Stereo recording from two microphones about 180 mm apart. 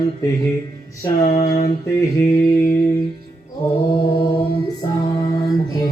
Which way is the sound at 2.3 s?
25° left (ahead or behind).